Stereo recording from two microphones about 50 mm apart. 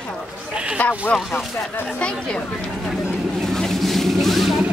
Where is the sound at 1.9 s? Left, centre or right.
Centre.